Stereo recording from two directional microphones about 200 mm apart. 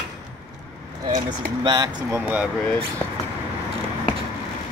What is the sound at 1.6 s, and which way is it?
Speech, 20° right (ahead or behind).